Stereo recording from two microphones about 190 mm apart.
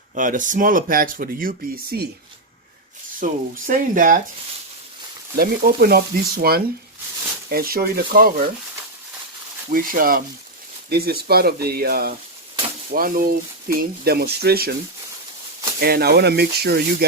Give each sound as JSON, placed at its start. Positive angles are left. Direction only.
{"t": 0.1, "sound": "speech", "side_deg": -45}
{"t": 3.2, "sound": "speech", "side_deg": -45}
{"t": 5.4, "sound": "speech", "side_deg": -55}
{"t": 9.6, "sound": "speech", "side_deg": -50}
{"t": 15.8, "sound": "speech", "side_deg": -55}